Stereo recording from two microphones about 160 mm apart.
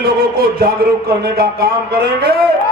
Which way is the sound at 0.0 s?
70° right (ahead or behind).